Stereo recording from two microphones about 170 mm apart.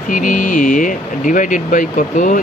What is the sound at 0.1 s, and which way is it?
Speech, 50° left (ahead or behind).